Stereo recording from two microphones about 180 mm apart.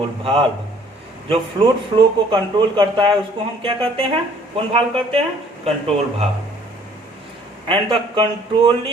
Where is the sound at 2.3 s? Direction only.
25° right (ahead or behind).